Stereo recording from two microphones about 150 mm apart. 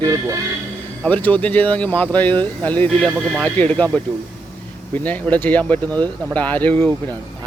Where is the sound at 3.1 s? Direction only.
5° right (ahead or behind).